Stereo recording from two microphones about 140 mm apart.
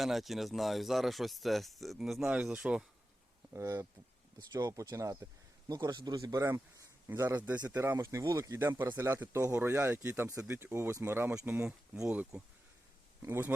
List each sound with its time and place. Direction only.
0.0 s speech: centre (ahead or behind)
3.5 s speech: 20° right (ahead or behind)
13.2 s speech: 20° right (ahead or behind)